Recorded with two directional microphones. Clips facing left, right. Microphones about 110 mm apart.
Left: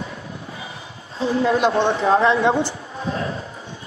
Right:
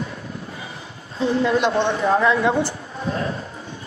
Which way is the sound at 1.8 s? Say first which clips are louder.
Left 2 dB; 30° left (ahead or behind).